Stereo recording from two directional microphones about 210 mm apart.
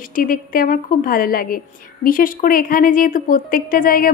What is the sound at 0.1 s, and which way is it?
A woman's voice, 45° left (ahead or behind).